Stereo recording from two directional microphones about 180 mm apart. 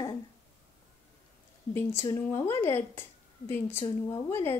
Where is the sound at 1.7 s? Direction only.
15° left (ahead or behind).